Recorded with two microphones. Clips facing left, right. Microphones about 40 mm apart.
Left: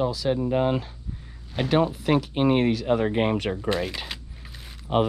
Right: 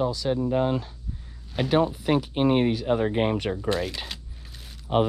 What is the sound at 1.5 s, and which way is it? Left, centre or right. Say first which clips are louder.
Speech: even; centre.